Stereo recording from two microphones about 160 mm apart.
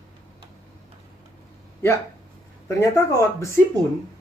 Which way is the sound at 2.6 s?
20° left (ahead or behind).